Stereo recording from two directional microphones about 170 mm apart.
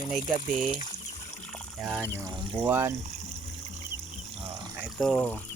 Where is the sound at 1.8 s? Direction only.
5° right (ahead or behind).